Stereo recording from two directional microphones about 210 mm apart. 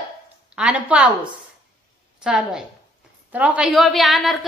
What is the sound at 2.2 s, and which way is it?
A woman's voice, 5° right (ahead or behind).